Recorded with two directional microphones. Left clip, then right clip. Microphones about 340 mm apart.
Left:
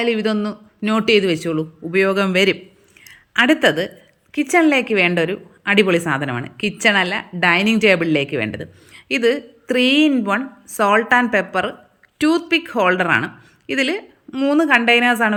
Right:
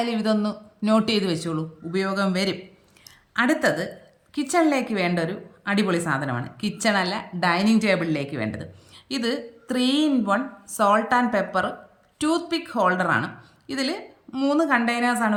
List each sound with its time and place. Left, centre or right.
0.0 s a man's voice: centre